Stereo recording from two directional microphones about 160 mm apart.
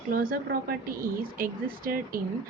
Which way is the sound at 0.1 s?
60° right (ahead or behind).